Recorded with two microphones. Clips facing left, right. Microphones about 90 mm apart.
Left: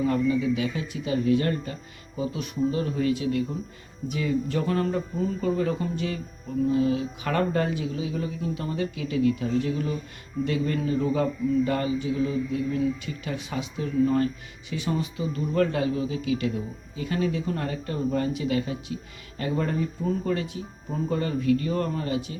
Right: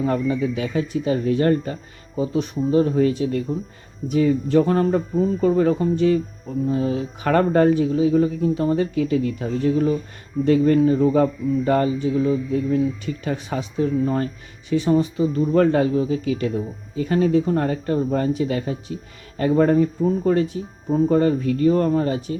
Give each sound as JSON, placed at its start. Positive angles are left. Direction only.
{"t": 0.0, "sound": "speech", "side_deg": -35}